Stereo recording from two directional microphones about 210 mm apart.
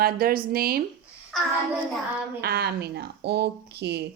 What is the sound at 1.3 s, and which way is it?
Child singing, centre (ahead or behind).